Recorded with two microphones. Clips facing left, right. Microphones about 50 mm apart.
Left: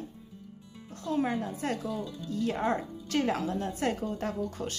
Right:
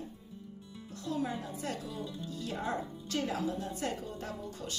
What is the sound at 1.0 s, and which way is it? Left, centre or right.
Speech, left.